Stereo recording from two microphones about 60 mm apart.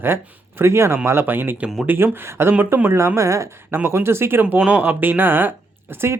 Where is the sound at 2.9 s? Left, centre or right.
Right.